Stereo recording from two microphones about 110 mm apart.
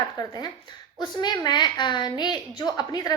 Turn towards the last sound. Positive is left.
turn(degrees=40)  # may be behind; listen again after turning